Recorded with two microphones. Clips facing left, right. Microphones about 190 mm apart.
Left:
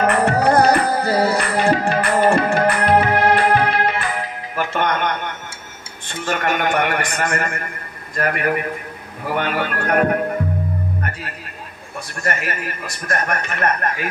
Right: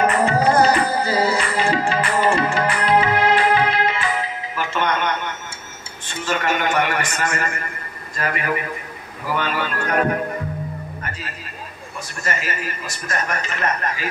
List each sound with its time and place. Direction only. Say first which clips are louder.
0.0 s music: left 1 dB; 65° left (ahead or behind)
6.0 s a sound: left 1 dB; 55° left (ahead or behind)
8.2 s a man's voice: left 4 dB; 55° left (ahead or behind)
11.0 s music: left 4 dB; 60° left (ahead or behind)
12.2 s a man's voice: left 2 dB; 60° left (ahead or behind)